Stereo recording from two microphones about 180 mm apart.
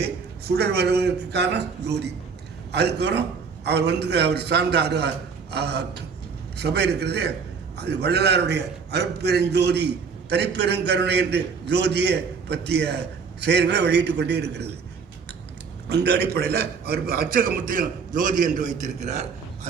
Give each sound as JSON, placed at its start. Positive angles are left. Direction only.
{"t": 0.4, "sound": "a man's voice", "side_deg": -65}
{"t": 15.9, "sound": "a man's voice", "side_deg": -65}